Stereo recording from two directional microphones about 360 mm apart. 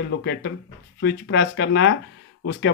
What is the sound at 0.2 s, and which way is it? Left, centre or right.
Speech, left.